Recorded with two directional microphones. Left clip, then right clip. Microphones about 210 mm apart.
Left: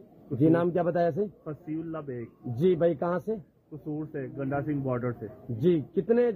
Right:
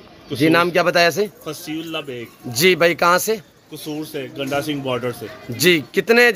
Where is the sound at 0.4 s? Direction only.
30° right (ahead or behind).